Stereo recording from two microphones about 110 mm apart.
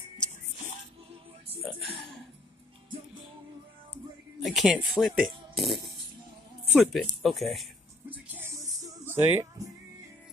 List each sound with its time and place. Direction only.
4.4 s speech: centre (ahead or behind)
8.1 s music: 15° right (ahead or behind)